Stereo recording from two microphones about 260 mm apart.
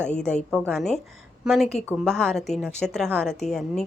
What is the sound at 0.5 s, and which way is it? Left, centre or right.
A woman's voice, centre.